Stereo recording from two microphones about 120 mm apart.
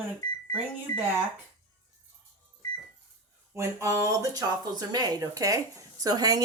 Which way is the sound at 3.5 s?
25° right (ahead or behind).